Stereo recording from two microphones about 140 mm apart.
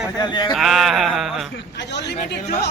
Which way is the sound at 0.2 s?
30° left (ahead or behind).